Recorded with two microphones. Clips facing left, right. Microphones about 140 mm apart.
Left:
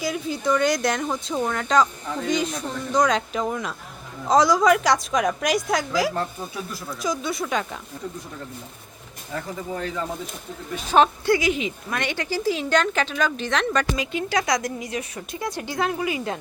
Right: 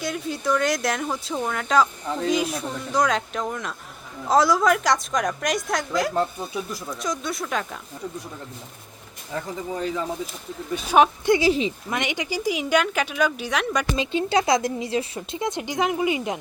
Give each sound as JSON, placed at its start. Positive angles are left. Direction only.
{"t": 0.0, "sound": "a woman's voice", "side_deg": 0}
{"t": 9.7, "sound": "speech", "side_deg": -15}
{"t": 11.3, "sound": "speech", "side_deg": -30}
{"t": 11.9, "sound": "speech", "side_deg": -15}
{"t": 13.9, "sound": "speech", "side_deg": -30}